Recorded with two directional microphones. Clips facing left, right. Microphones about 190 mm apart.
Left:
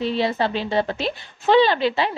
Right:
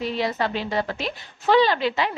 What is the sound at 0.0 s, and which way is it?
A woman's voice, 30° left (ahead or behind).